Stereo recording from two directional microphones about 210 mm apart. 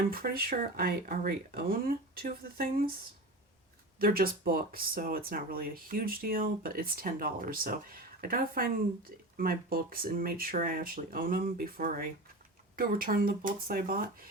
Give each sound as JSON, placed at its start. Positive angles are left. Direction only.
{"t": 0.1, "sound": "speech", "side_deg": -45}
{"t": 4.0, "sound": "speech", "side_deg": -45}